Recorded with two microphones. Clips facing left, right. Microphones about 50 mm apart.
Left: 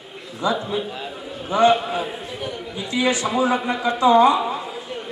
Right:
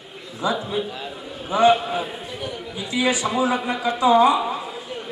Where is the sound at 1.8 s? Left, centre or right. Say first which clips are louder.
Left 1 dB; centre.